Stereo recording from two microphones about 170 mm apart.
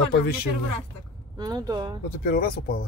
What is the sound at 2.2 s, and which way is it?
Speech, 60° left (ahead or behind).